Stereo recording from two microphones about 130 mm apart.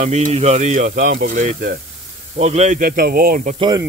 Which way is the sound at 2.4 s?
60° right (ahead or behind).